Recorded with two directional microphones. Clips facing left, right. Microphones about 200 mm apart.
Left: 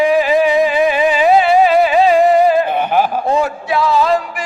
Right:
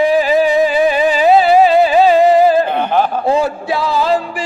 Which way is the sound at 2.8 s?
10° left (ahead or behind).